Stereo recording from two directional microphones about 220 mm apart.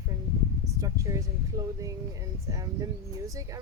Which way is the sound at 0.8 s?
15° right (ahead or behind).